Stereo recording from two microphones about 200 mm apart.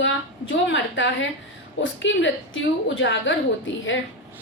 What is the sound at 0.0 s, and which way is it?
A woman's voice, 65° left (ahead or behind).